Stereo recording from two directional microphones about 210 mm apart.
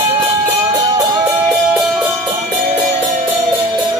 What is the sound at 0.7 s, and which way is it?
Music, 15° right (ahead or behind).